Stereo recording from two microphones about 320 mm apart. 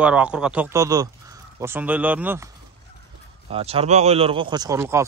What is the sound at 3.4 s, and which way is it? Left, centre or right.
Speech, centre.